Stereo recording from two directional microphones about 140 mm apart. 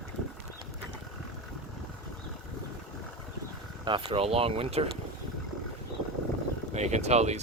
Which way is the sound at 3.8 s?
35° right (ahead or behind).